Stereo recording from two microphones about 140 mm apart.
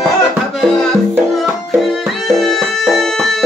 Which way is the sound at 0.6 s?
5° left (ahead or behind).